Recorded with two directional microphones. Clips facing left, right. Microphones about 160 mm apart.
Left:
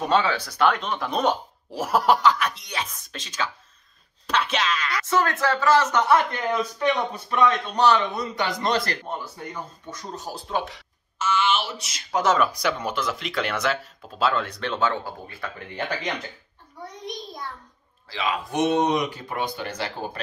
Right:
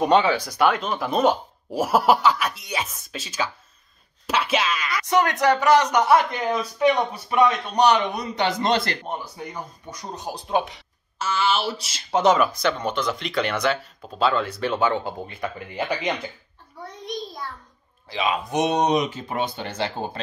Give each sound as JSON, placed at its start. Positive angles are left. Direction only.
{"t": 0.0, "sound": "speech", "side_deg": -15}
{"t": 11.1, "sound": "speech", "side_deg": -35}
{"t": 12.6, "sound": "speech", "side_deg": 5}
{"t": 18.0, "sound": "speech", "side_deg": -20}